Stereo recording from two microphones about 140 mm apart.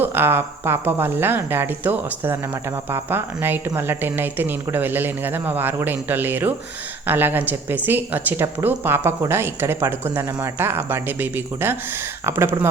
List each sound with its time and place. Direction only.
0.0 s speech: 15° right (ahead or behind)